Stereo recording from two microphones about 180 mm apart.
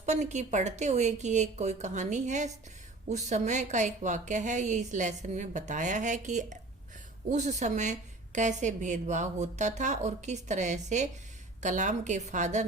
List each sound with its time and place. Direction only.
0.0 s a woman's voice: 40° right (ahead or behind)